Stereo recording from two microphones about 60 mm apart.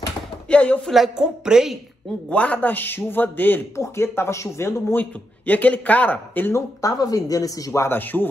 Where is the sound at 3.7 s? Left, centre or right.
Left.